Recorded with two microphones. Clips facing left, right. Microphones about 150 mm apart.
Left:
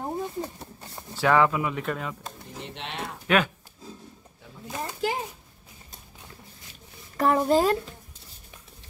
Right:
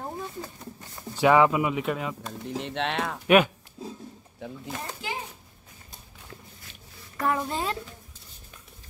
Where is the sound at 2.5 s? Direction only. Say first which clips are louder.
Right 9 dB; 90° right.